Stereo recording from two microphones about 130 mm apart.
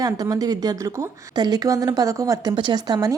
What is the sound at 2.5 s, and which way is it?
Speech, 35° right (ahead or behind).